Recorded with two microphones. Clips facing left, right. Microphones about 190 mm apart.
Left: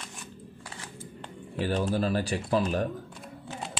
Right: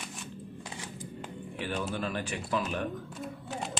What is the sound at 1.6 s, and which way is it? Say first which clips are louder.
Speech: left 6 dB; 35° left (ahead or behind).